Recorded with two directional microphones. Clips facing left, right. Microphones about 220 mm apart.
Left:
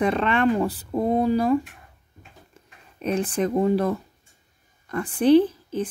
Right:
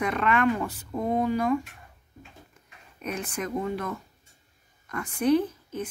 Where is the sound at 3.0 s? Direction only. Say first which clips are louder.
Left 9 dB; 30° left (ahead or behind).